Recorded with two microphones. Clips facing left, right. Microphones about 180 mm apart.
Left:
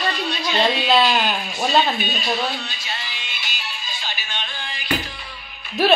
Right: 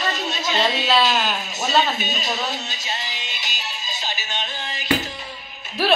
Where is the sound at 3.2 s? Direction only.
40° right (ahead or behind).